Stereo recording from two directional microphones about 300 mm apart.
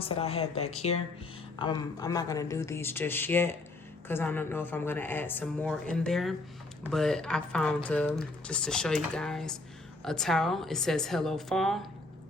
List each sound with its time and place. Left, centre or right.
0.0 s speech: centre